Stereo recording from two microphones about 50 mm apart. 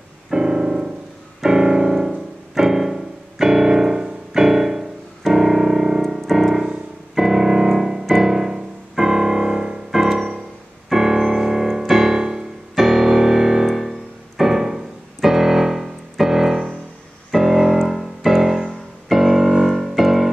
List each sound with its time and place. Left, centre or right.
0.3 s piano: centre
6.1 s music: centre
11.9 s keyboard: centre
12.7 s piano: centre
13.7 s music: centre
15.2 s keyboard: centre
17.3 s piano: centre
17.8 s music: centre